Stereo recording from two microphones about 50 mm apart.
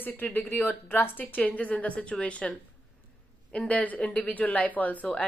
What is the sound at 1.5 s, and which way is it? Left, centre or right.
Speech, left.